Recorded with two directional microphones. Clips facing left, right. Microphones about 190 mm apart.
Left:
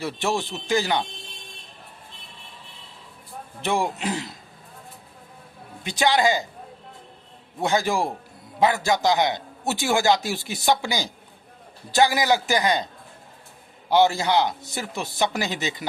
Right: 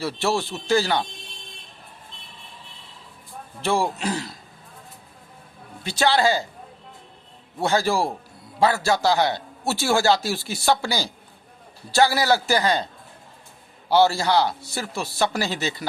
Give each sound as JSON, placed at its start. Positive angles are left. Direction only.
{"t": 0.0, "sound": "a man's voice", "side_deg": 15}
{"t": 3.6, "sound": "speech", "side_deg": 20}
{"t": 5.8, "sound": "a man's voice", "side_deg": 15}
{"t": 7.6, "sound": "a man's voice", "side_deg": 15}
{"t": 13.9, "sound": "a man's voice", "side_deg": 15}